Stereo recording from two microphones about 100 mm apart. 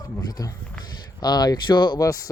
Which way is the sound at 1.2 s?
45° left (ahead or behind).